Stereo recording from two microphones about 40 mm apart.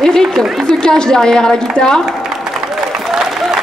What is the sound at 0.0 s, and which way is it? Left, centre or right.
A woman's voice, centre.